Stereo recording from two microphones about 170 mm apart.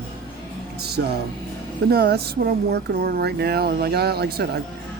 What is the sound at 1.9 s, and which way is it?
Speech, 70° right (ahead or behind).